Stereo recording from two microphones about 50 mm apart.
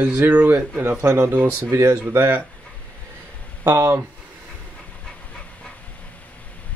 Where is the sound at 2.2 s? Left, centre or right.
Right.